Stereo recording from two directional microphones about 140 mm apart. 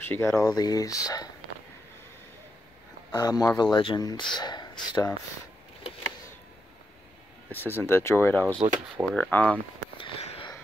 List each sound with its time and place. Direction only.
0.0 s speech: 15° left (ahead or behind)
3.1 s speech: 30° left (ahead or behind)
7.8 s speech: 20° left (ahead or behind)
9.9 s a sound: 40° left (ahead or behind)